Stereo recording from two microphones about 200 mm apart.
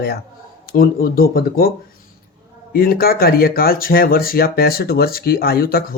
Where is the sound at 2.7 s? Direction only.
50° left (ahead or behind).